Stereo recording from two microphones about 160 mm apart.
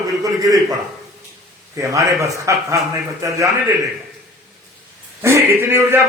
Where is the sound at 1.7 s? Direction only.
20° right (ahead or behind).